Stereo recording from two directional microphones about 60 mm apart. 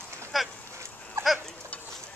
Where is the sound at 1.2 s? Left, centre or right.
Right.